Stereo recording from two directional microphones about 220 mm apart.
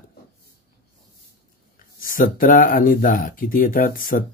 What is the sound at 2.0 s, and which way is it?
Speech, 40° left (ahead or behind).